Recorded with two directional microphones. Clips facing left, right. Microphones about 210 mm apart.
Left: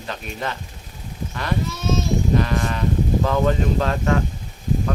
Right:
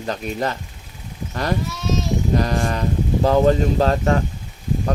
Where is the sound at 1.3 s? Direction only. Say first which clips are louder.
Right 4 dB; 40° right (ahead or behind).